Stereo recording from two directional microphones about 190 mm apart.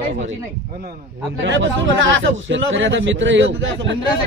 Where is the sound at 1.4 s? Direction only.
70° right (ahead or behind).